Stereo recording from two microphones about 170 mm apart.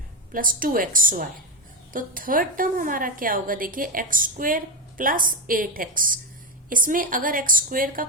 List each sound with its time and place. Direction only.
0.3 s a woman's voice: 55° right (ahead or behind)